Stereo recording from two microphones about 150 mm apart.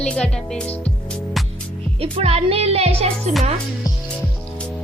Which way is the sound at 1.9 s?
40° right (ahead or behind).